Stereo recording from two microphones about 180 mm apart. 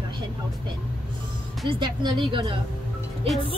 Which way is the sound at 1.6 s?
30° right (ahead or behind).